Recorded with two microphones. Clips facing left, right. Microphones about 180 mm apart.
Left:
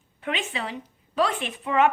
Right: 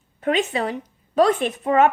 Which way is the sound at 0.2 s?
45° right (ahead or behind).